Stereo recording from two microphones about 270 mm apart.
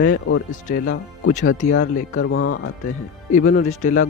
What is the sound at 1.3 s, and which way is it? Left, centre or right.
Speech, left.